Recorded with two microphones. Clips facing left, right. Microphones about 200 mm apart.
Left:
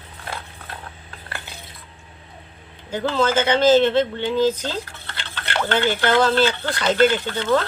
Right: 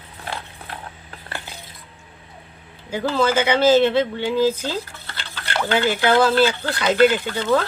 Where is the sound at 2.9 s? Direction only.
10° right (ahead or behind).